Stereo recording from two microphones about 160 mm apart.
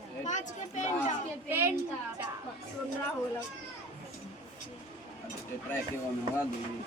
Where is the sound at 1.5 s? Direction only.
15° right (ahead or behind).